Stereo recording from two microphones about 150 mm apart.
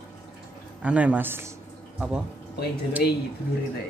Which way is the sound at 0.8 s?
10° right (ahead or behind).